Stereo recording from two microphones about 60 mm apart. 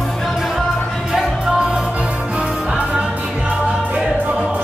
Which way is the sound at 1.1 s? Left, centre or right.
Centre.